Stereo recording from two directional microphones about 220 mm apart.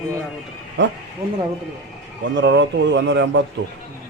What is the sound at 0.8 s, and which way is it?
Speech, 55° right (ahead or behind).